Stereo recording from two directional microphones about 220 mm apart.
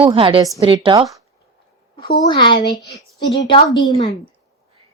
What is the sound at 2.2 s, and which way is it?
Speech, 20° left (ahead or behind).